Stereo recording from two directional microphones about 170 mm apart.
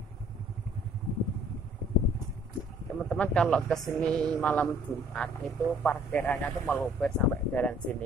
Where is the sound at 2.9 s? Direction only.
5° left (ahead or behind).